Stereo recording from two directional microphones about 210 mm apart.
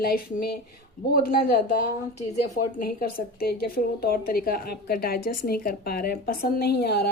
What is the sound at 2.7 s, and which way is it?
Speech, 45° left (ahead or behind).